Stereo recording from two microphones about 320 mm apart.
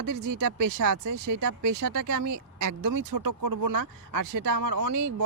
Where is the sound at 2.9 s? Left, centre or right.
Right.